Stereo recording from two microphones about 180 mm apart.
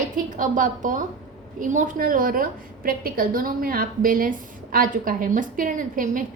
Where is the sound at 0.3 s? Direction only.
45° right (ahead or behind).